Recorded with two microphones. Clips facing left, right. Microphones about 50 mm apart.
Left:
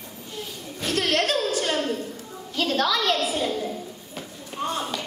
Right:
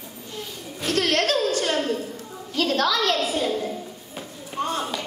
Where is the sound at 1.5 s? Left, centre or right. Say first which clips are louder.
Right 1 dB; centre.